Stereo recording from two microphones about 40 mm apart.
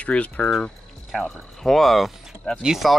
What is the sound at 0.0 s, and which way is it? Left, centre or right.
Speech, left.